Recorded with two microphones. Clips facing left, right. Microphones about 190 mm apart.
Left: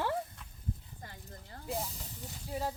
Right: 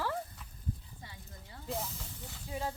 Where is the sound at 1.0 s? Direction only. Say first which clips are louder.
Left 2 dB; 50° left (ahead or behind).